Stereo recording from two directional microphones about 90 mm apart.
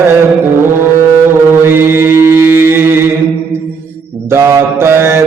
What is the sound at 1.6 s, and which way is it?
Mantra, 25° right (ahead or behind).